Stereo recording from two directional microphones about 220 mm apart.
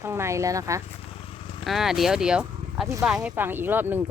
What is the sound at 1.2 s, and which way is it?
Vehicle, 25° left (ahead or behind).